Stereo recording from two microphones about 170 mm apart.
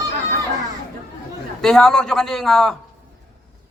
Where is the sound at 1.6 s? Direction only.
5° left (ahead or behind).